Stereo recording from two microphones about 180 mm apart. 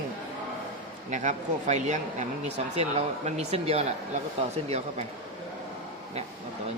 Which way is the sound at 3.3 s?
35° right (ahead or behind).